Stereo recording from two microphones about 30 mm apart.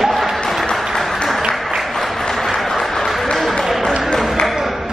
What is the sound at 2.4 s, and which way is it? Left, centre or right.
Applause, centre.